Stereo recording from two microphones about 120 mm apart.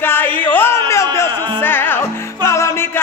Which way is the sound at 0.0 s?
15° left (ahead or behind).